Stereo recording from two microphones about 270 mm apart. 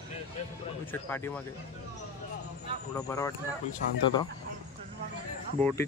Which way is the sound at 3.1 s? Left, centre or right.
Centre.